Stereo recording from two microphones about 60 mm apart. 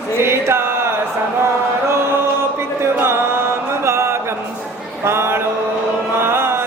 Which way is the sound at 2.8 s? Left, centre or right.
Right.